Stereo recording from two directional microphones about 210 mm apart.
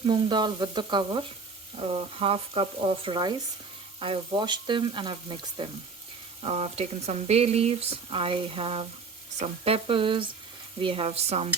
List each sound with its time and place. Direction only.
0.0 s speech: 25° right (ahead or behind)